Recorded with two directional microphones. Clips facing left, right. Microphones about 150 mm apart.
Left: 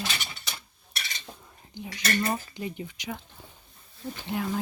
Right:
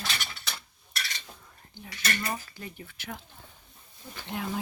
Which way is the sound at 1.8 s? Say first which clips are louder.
Left 8 dB; 15° left (ahead or behind).